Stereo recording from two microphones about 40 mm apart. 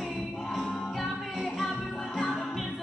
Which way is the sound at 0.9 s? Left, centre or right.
Centre.